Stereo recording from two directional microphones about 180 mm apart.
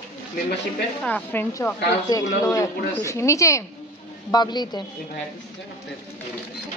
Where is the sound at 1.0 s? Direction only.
10° left (ahead or behind).